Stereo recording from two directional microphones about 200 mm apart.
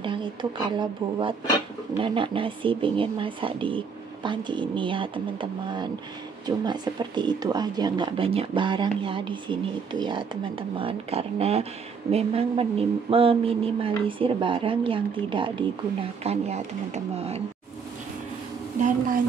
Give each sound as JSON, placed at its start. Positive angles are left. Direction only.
{"t": 0.0, "sound": "speech", "side_deg": -25}